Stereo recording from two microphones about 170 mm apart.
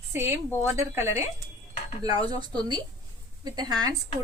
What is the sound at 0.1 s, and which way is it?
A woman's voice, 15° right (ahead or behind).